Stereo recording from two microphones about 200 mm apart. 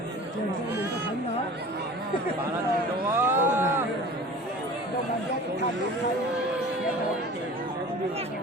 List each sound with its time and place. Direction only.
3.2 s speech: 10° right (ahead or behind)